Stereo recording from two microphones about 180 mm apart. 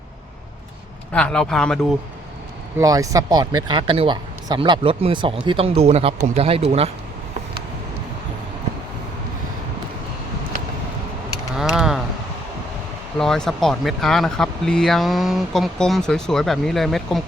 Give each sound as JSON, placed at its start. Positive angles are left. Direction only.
{"t": 1.1, "sound": "speech", "side_deg": 5}
{"t": 2.7, "sound": "speech", "side_deg": -20}
{"t": 11.5, "sound": "a sound", "side_deg": 0}
{"t": 13.1, "sound": "speech", "side_deg": 5}